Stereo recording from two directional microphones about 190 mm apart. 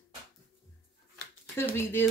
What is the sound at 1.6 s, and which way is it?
Speech, 10° left (ahead or behind).